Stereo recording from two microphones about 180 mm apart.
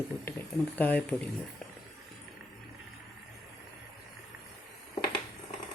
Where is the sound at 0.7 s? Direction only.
10° left (ahead or behind).